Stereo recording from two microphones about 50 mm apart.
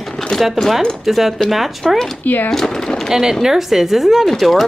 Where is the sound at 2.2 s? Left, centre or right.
Left.